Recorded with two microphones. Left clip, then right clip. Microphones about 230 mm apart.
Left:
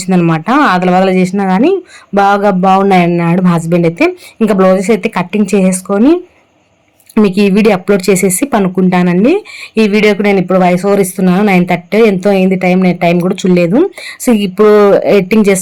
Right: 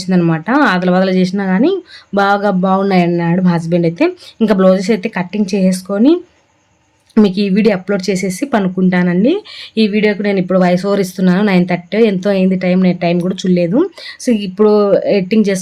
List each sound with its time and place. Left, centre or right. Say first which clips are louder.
0.2 s a woman's voice: left 3 dB; centre